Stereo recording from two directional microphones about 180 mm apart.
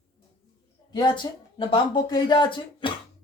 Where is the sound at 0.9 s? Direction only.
25° left (ahead or behind).